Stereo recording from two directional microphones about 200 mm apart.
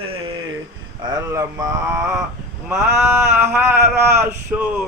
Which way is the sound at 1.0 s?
15° right (ahead or behind).